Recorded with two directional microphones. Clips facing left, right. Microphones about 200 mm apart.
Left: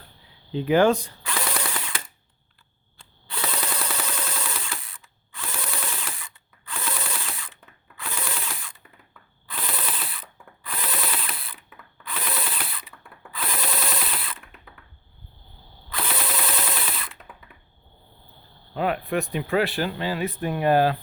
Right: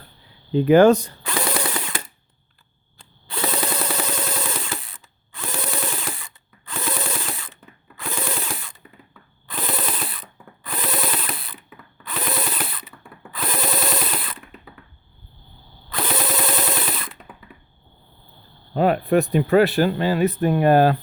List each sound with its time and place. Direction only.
0.5 s mechanisms: 45° right (ahead or behind)
3.2 s a sound: 40° right (ahead or behind)
7.9 s mechanisms: 40° right (ahead or behind)
9.5 s ratchet: 45° right (ahead or behind)
13.3 s drill: 45° right (ahead or behind)
15.9 s drill: 45° right (ahead or behind)
17.5 s computer keyboard: centre (ahead or behind)
18.7 s speech: 40° right (ahead or behind)